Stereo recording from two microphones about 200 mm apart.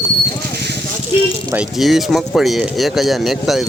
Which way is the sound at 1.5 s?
5° right (ahead or behind).